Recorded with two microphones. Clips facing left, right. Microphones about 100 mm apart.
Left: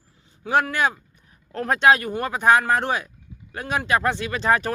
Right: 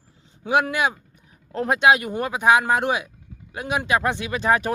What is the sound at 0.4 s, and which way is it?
Speech, 15° right (ahead or behind).